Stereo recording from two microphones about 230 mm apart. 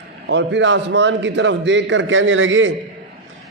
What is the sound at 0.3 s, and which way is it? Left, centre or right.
A man's voice, right.